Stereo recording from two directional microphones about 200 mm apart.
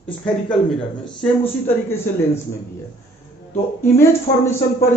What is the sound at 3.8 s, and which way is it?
Speech, 15° left (ahead or behind).